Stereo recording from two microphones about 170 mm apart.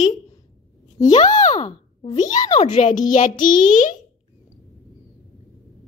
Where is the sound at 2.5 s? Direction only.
40° left (ahead or behind).